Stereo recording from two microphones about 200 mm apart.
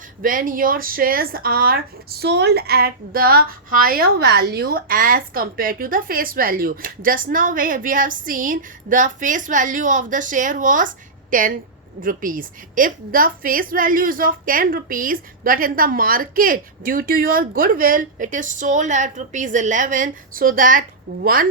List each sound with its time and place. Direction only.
0.2 s speech: 45° right (ahead or behind)